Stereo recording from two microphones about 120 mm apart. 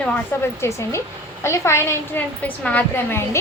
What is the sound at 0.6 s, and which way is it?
A woman's voice, 25° left (ahead or behind).